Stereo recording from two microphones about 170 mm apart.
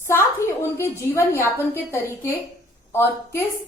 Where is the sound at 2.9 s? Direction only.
15° left (ahead or behind).